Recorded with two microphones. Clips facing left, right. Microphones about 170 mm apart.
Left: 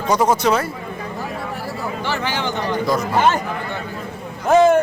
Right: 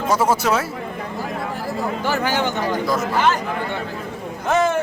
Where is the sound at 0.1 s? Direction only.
5° right (ahead or behind).